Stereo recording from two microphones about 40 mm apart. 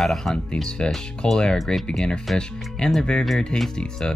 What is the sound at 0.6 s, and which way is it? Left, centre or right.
Speech, centre.